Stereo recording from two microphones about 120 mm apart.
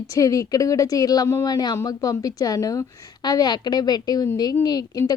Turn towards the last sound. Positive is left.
turn(degrees=30)  # may be behind; listen again after turning